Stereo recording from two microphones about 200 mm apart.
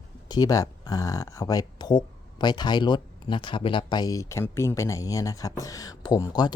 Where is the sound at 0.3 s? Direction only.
20° left (ahead or behind).